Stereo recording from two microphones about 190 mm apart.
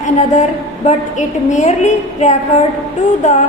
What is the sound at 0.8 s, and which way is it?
A woman's voice, 40° left (ahead or behind).